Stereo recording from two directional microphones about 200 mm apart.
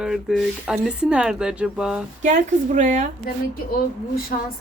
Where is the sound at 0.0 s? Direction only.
Centre (ahead or behind).